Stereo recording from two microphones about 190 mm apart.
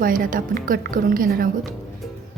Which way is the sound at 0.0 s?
45° right (ahead or behind).